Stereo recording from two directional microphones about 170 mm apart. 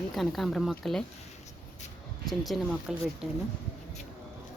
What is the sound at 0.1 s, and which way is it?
Speech, centre (ahead or behind).